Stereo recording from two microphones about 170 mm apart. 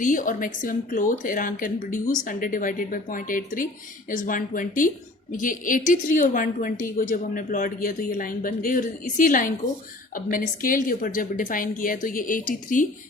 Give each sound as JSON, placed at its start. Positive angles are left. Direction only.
{"t": 0.0, "sound": "a woman's voice", "side_deg": 50}